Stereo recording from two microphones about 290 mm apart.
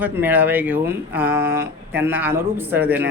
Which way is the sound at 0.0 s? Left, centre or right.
Centre.